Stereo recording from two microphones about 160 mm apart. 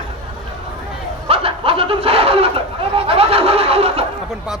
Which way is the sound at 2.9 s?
35° right (ahead or behind).